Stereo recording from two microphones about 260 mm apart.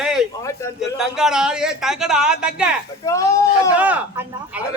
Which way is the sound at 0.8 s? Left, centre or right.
Centre.